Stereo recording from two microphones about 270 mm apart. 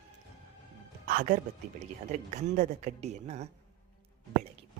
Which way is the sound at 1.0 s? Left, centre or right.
Right.